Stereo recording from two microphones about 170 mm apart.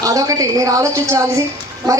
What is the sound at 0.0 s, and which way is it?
A woman's voice, 20° right (ahead or behind).